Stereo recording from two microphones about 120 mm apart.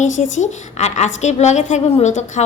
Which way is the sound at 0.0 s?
85° left.